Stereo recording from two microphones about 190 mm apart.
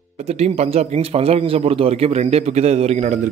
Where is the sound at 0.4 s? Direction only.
35° right (ahead or behind).